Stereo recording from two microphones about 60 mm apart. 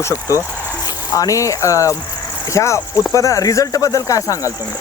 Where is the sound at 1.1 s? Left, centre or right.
Left.